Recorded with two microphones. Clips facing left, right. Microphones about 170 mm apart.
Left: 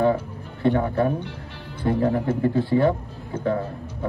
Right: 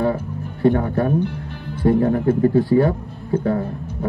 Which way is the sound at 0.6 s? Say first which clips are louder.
Right 3 dB; 40° right (ahead or behind).